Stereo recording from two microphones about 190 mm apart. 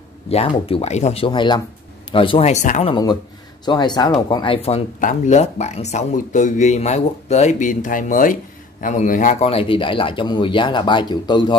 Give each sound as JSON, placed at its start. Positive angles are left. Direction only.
{"t": 0.3, "sound": "speech", "side_deg": 30}
{"t": 2.9, "sound": "speech", "side_deg": 20}